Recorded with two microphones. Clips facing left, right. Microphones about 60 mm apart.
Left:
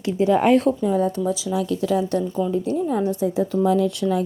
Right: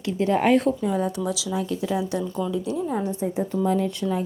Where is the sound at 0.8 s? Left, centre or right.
Right.